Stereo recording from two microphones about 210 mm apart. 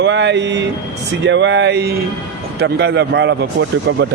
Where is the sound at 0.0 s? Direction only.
55° right (ahead or behind).